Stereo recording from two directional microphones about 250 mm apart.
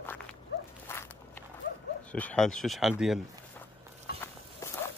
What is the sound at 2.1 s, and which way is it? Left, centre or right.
Speech, centre.